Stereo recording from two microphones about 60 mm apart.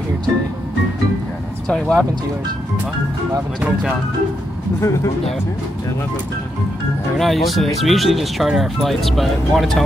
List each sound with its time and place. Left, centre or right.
1.7 s speech: centre
3.6 s speech: centre
4.7 s speech: left
7.2 s speech: centre